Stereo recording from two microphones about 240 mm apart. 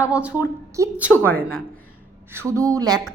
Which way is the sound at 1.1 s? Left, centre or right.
Centre.